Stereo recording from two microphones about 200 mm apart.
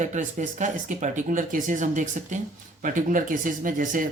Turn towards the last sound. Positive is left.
turn(degrees=-40)  # may be behind; listen again after turning